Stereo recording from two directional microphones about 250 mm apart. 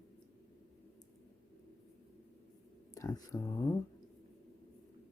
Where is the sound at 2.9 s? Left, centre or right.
Centre.